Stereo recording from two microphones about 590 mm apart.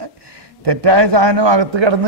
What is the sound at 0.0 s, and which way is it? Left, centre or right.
A man's voice, right.